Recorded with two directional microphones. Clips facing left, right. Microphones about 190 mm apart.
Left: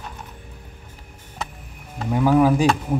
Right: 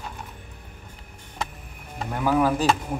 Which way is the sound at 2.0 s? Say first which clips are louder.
Left 5 dB; 10° left (ahead or behind).